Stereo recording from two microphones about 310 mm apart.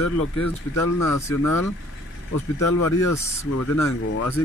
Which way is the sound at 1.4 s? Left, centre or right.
Left.